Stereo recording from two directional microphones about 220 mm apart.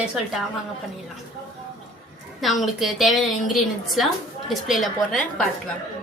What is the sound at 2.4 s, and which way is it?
A woman's voice, centre (ahead or behind).